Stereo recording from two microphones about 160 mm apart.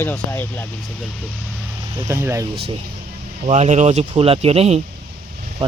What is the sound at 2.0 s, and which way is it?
Speech, 15° right (ahead or behind).